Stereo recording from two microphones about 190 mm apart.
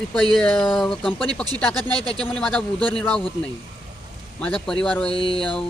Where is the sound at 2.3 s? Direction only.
5° left (ahead or behind).